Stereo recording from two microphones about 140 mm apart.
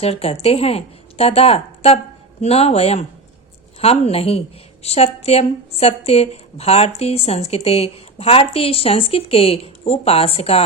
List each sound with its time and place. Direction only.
0.0 s speech: 45° left (ahead or behind)